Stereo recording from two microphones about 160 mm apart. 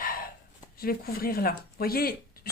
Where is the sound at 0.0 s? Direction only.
65° left (ahead or behind).